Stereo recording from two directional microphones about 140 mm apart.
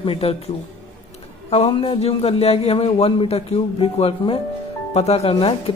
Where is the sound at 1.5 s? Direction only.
45° left (ahead or behind).